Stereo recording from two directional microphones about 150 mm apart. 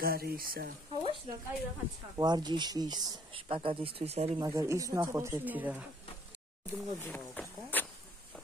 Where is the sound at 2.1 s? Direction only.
30° right (ahead or behind).